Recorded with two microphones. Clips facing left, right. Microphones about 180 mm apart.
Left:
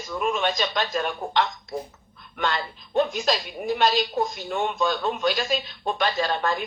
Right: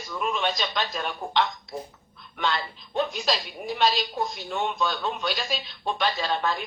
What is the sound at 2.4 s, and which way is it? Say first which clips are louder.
Speech: left 1 dB; 45° left (ahead or behind).